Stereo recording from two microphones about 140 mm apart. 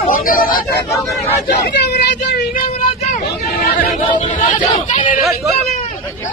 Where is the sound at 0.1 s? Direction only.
85° left.